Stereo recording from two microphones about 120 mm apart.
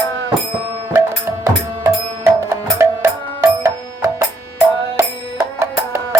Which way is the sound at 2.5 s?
20° right (ahead or behind).